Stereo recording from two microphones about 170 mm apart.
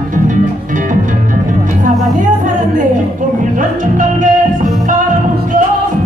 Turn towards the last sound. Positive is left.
turn(degrees=-50)  # may be behind; listen again after turning